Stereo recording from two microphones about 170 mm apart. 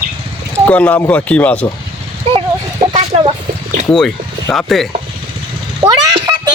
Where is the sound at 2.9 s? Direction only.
35° right (ahead or behind).